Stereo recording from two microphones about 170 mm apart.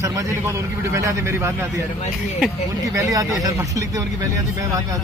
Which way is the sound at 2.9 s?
20° right (ahead or behind).